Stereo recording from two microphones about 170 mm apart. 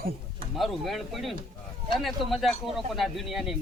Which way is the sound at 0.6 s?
Centre (ahead or behind).